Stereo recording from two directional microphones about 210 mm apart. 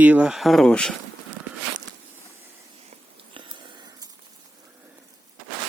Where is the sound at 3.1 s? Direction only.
25° right (ahead or behind).